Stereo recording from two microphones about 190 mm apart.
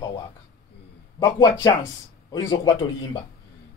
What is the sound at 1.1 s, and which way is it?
Speech, 20° left (ahead or behind).